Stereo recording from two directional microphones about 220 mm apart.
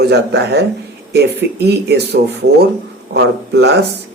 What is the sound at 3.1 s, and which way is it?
Speech, 50° right (ahead or behind).